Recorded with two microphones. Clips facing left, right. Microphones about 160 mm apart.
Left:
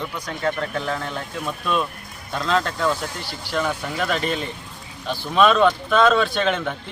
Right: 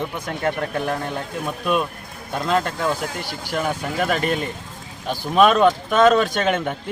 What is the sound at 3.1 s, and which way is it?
Speech, 45° right (ahead or behind).